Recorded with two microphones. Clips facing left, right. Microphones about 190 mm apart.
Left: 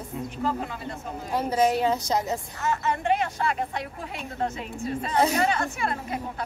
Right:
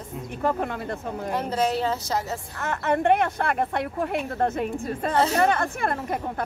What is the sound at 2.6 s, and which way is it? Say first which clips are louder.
A woman's voice: right 5 dB; 60° right (ahead or behind).